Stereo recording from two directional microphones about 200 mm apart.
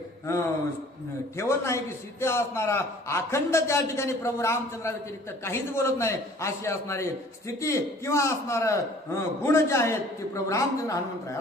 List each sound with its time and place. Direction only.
0.3 s a man's voice: 15° left (ahead or behind)